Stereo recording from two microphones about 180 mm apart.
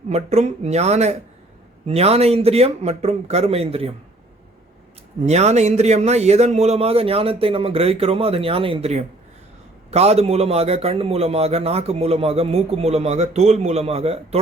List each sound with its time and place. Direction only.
0.1 s a man's voice: 40° right (ahead or behind)
5.2 s a man's voice: 40° right (ahead or behind)